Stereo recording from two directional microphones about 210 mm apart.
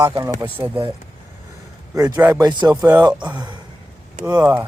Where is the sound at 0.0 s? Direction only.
15° right (ahead or behind).